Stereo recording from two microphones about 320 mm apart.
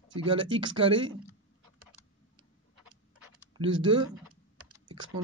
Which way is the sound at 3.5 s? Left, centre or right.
Centre.